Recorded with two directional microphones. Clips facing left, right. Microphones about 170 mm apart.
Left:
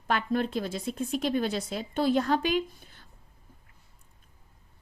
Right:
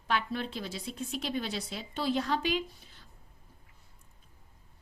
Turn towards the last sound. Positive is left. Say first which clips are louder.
# left 5 dB
turn(degrees=50)  # may be behind; listen again after turning